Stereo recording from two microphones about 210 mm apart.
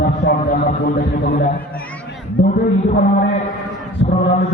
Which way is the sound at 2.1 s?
50° left (ahead or behind).